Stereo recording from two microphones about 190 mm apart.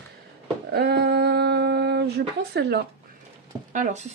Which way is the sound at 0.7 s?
60° right (ahead or behind).